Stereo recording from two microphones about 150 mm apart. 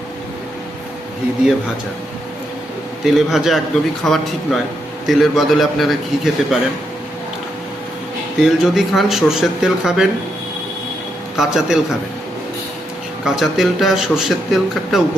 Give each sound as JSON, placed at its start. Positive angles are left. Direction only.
{"t": 3.0, "sound": "speech", "side_deg": 0}
{"t": 8.4, "sound": "speech", "side_deg": 0}
{"t": 11.3, "sound": "speech", "side_deg": 0}
{"t": 13.2, "sound": "speech", "side_deg": 0}